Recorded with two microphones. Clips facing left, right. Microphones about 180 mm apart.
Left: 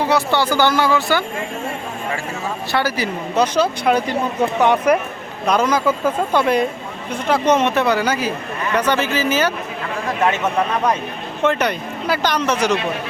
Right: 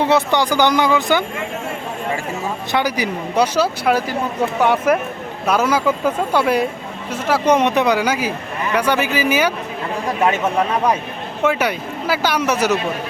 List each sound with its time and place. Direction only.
0.0 s speech: 20° right (ahead or behind)
2.7 s speech: 15° right (ahead or behind)
11.4 s speech: 5° right (ahead or behind)